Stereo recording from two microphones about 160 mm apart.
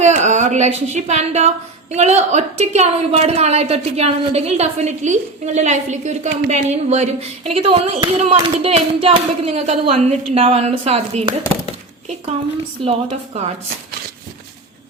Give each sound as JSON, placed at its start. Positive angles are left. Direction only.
{"t": 0.0, "sound": "a woman's voice", "side_deg": -45}
{"t": 12.8, "sound": "speech", "side_deg": -40}